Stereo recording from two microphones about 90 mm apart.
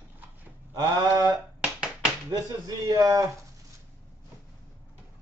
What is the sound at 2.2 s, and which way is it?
Speech, 40° right (ahead or behind).